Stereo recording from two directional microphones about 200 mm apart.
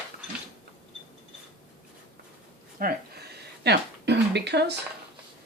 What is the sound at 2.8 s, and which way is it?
Speech, 45° right (ahead or behind).